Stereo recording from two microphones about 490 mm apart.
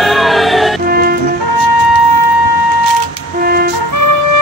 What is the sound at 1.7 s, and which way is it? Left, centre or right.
Music, left.